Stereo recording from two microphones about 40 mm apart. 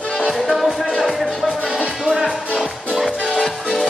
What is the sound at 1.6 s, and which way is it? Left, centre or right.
Music, right.